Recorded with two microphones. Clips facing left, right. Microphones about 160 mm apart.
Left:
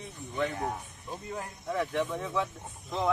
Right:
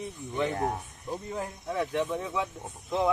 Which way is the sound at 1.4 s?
15° right (ahead or behind).